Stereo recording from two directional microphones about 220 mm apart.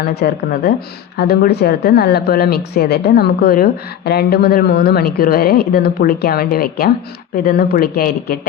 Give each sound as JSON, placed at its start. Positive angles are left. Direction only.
{"t": 0.0, "sound": "speech", "side_deg": 45}